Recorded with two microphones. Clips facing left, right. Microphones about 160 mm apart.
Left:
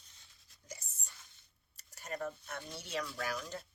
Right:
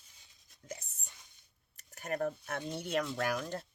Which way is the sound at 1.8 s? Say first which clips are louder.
Right 6 dB; 60° right (ahead or behind).